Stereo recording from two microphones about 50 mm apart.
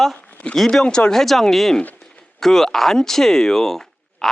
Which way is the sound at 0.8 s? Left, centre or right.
Centre.